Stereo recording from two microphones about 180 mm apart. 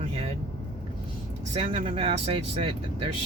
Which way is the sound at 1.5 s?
30° right (ahead or behind).